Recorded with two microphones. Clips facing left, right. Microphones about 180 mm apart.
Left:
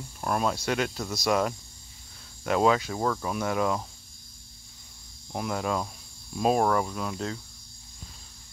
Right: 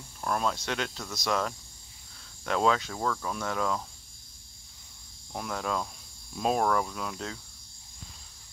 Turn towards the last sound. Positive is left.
turn(degrees=5)  # may be behind; listen again after turning